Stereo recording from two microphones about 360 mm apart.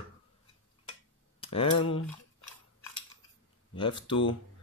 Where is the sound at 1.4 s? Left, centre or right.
Centre.